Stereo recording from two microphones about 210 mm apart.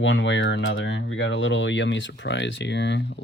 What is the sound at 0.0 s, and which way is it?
Speech, 65° left (ahead or behind).